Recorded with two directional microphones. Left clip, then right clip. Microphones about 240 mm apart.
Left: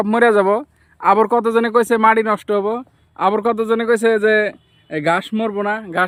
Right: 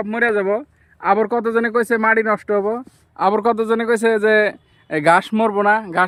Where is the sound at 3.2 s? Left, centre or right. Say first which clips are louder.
Even; centre.